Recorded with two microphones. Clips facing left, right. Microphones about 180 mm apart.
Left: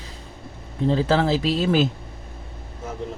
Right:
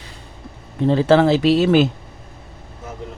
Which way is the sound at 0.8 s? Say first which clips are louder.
Right 6 dB; 70° right (ahead or behind).